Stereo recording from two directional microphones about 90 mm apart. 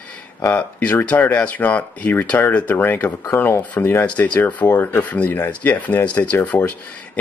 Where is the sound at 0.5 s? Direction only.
15° left (ahead or behind).